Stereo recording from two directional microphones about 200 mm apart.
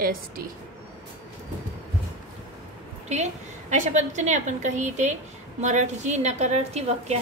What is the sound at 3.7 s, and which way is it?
A woman's voice, 35° right (ahead or behind).